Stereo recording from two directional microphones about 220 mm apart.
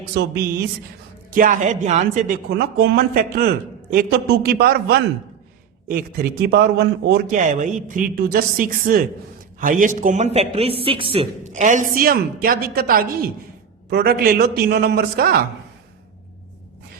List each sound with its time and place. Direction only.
0.1 s a man's voice: 45° right (ahead or behind)
1.4 s a man's voice: 35° right (ahead or behind)